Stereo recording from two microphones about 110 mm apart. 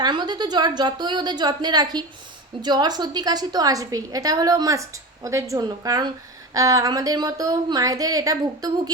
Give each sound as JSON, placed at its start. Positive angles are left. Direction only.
{"t": 0.0, "sound": "a woman's voice", "side_deg": -40}